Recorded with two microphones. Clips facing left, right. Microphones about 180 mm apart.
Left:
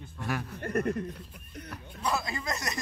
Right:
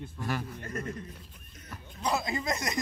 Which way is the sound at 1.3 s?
65° left (ahead or behind).